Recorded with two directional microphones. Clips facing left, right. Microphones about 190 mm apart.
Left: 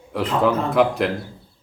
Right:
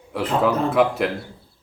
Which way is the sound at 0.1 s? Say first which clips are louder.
Left 1 dB; centre (ahead or behind).